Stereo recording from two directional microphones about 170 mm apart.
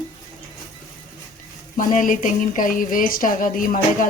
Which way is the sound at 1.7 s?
50° left (ahead or behind).